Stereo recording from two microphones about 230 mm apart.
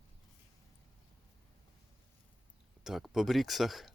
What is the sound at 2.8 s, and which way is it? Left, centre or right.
Speech, centre.